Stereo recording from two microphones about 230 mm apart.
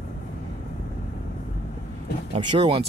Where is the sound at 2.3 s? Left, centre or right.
Right.